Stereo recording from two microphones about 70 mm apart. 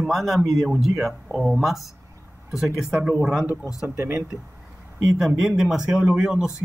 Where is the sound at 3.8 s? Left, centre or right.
Right.